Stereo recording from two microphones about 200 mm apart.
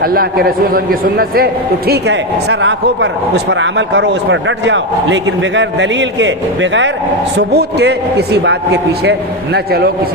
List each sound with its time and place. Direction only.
0.0 s a man's voice: 50° right (ahead or behind)
1.9 s speech: 60° right (ahead or behind)
7.3 s speech: 55° right (ahead or behind)